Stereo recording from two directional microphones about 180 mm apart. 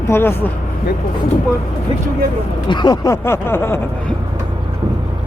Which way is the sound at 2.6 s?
25° left (ahead or behind).